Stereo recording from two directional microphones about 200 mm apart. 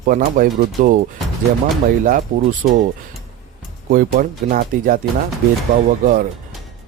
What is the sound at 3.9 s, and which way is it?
Speech, 45° right (ahead or behind).